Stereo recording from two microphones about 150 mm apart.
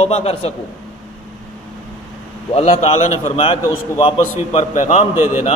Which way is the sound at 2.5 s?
45° left (ahead or behind).